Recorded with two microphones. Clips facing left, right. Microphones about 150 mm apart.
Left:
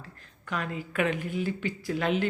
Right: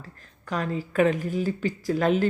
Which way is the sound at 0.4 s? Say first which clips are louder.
Right 5 dB; 40° right (ahead or behind).